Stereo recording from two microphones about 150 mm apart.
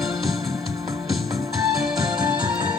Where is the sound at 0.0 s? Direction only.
Centre (ahead or behind).